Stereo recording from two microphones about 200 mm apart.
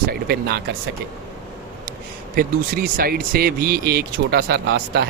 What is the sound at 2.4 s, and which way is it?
Speech, 50° right (ahead or behind).